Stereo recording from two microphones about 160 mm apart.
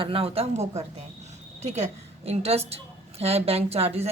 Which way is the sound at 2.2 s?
40° right (ahead or behind).